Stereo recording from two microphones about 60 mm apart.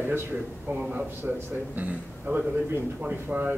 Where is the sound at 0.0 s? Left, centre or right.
Right; by 3.3 s centre.